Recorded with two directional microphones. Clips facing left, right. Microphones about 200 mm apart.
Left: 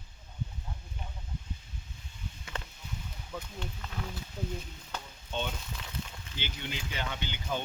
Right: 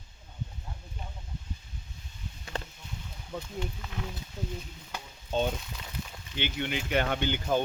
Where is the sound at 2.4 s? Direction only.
35° right (ahead or behind).